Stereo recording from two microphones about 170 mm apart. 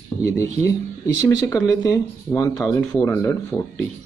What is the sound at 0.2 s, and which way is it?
Speech, 20° left (ahead or behind).